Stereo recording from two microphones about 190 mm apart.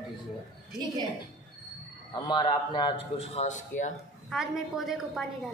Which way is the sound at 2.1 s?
25° left (ahead or behind).